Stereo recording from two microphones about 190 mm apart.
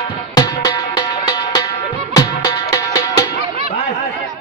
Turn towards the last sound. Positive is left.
turn(degrees=15)  # may be behind; listen again after turning